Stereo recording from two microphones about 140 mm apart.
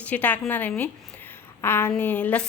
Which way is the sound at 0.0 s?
10° left (ahead or behind).